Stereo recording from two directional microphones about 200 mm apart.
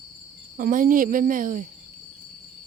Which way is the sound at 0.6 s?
45° right (ahead or behind).